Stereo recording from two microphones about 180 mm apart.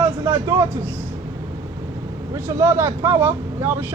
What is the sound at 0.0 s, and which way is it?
Vehicle, 15° right (ahead or behind).